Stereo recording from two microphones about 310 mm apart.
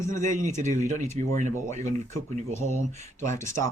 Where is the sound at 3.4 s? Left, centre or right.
Centre.